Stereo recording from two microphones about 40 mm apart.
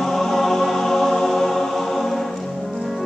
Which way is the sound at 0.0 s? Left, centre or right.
Centre.